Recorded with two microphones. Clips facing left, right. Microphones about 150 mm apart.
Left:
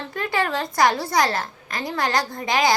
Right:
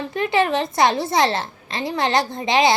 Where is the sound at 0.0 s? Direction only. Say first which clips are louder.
Right 5 dB; 20° right (ahead or behind).